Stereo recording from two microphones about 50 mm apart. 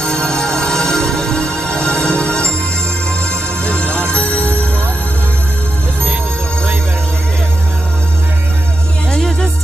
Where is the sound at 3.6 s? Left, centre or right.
Left.